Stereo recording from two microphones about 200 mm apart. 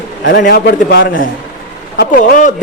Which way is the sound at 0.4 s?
50° left (ahead or behind).